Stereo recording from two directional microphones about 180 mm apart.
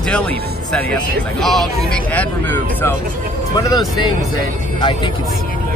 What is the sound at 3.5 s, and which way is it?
Speech, 25° left (ahead or behind).